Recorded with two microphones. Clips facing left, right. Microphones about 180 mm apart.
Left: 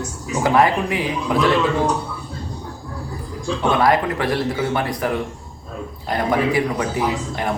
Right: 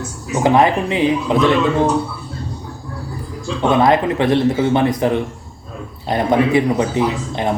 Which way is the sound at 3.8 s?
20° right (ahead or behind).